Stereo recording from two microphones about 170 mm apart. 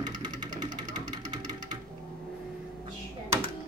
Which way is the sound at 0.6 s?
25° right (ahead or behind).